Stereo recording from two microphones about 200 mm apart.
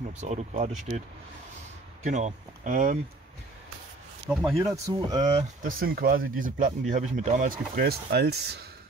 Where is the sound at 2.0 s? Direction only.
35° right (ahead or behind).